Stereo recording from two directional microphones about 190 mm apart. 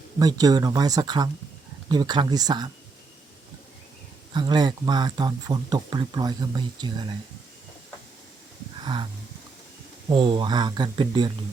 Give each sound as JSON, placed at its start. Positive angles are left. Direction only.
{"t": 0.2, "sound": "speech", "side_deg": -20}
{"t": 4.4, "sound": "speech", "side_deg": -20}
{"t": 8.8, "sound": "a sound", "side_deg": -25}
{"t": 10.1, "sound": "speech", "side_deg": -25}